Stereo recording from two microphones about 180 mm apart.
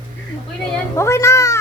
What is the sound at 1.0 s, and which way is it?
Speech, 15° left (ahead or behind).